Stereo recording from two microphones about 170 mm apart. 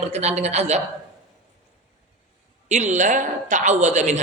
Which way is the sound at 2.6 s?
45° right (ahead or behind).